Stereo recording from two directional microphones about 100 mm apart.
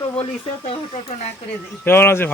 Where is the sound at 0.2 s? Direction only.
75° left (ahead or behind).